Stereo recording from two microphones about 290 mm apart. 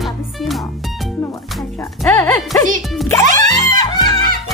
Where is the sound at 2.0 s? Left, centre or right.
Centre.